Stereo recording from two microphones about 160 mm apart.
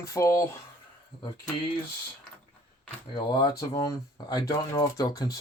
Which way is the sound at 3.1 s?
30° left (ahead or behind).